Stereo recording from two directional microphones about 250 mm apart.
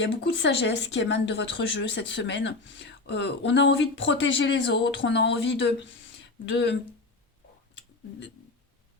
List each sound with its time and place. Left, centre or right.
0.0 s speech: left